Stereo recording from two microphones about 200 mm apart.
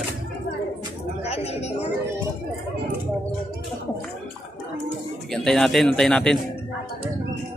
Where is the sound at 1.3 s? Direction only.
30° left (ahead or behind).